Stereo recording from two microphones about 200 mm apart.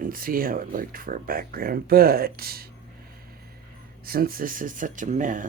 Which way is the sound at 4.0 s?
50° right (ahead or behind).